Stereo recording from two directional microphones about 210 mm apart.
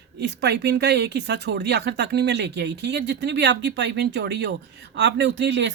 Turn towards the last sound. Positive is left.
turn(degrees=-55)  # may be behind; listen again after turning